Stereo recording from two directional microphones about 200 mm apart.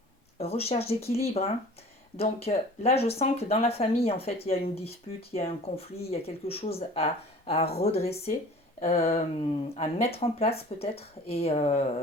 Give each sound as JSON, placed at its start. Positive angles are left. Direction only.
{"t": 0.3, "sound": "speech", "side_deg": 30}